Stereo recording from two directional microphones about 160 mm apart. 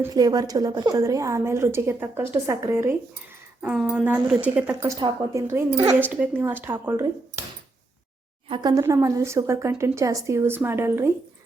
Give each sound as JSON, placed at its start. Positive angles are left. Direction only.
{"t": 0.0, "sound": "a woman's voice", "side_deg": -25}
{"t": 3.6, "sound": "a woman's voice", "side_deg": -5}
{"t": 4.9, "sound": "a woman's voice", "side_deg": -25}
{"t": 5.7, "sound": "speech", "side_deg": -35}
{"t": 6.0, "sound": "a woman's voice", "side_deg": -10}
{"t": 8.4, "sound": "speech", "side_deg": -35}
{"t": 8.7, "sound": "a woman's voice", "side_deg": -20}